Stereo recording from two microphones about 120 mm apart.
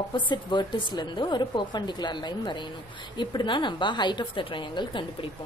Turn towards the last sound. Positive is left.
turn(degrees=45)  # may be behind; listen again after turning